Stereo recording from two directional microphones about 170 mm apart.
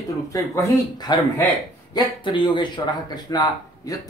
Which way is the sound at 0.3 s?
20° left (ahead or behind).